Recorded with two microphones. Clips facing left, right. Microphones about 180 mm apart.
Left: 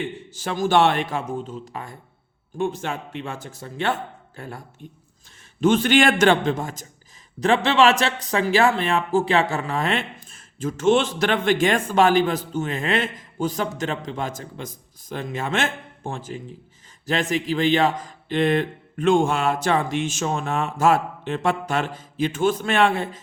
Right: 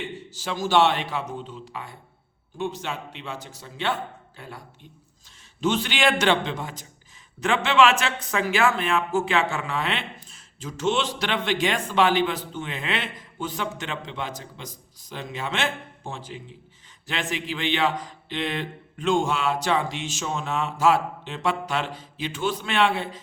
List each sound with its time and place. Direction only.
0.0 s a man's voice: 55° left (ahead or behind)